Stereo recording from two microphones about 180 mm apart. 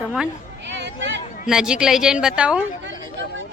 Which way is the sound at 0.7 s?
80° right.